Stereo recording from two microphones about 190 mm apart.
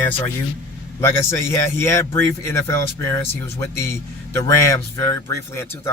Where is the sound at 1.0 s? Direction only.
15° left (ahead or behind).